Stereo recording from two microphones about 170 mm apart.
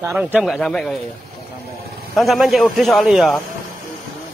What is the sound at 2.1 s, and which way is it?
A man's voice, centre (ahead or behind).